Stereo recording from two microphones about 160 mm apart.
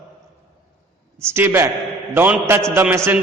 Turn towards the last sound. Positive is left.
turn(degrees=-15)  # may be behind; listen again after turning